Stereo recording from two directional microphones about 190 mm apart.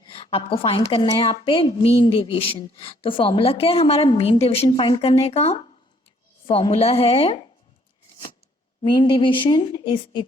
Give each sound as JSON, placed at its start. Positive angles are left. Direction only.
{"t": 0.0, "sound": "a woman's voice", "side_deg": 25}
{"t": 8.8, "sound": "a woman's voice", "side_deg": 25}